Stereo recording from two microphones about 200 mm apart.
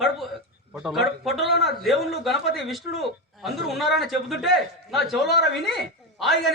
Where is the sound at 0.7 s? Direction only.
Centre (ahead or behind).